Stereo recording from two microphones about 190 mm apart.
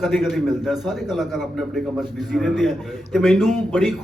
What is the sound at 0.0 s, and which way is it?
A man's voice, centre (ahead or behind).